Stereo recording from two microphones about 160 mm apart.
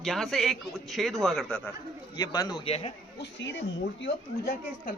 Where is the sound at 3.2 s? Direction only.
90° left.